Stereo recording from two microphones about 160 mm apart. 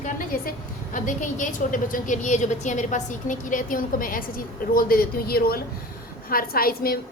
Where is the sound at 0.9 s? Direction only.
55° left (ahead or behind).